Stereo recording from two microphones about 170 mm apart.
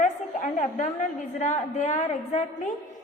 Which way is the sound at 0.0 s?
45° left (ahead or behind).